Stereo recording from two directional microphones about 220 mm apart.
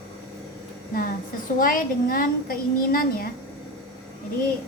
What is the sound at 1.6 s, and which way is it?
A woman's voice, 40° left (ahead or behind).